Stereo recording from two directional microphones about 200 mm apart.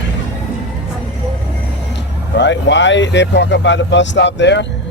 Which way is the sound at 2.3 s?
65° left (ahead or behind).